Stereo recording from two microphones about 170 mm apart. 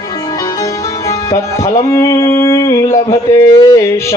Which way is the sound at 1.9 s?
20° left (ahead or behind).